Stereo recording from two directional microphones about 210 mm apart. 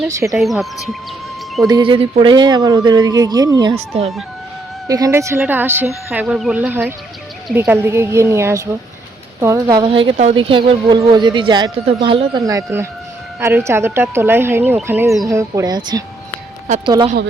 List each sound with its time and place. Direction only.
0.1 s speech: 15° right (ahead or behind)
0.3 s speech: centre (ahead or behind)
1.6 s speech: 20° right (ahead or behind)